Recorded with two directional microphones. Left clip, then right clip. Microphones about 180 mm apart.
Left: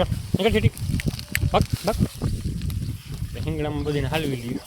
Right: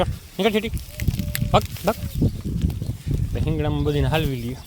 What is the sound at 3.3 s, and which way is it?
Speech, 15° right (ahead or behind).